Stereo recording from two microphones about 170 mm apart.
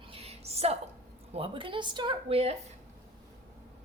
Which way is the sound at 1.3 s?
30° right (ahead or behind).